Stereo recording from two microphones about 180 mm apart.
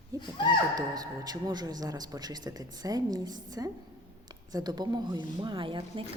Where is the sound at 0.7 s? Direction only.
20° right (ahead or behind).